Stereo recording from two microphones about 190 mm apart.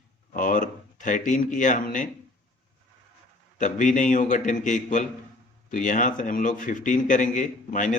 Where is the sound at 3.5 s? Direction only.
40° left (ahead or behind).